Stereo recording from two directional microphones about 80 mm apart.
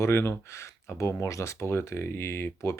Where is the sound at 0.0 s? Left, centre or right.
Left.